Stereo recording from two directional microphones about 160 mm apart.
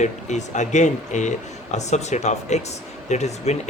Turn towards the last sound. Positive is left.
turn(degrees=45)  # may be behind; listen again after turning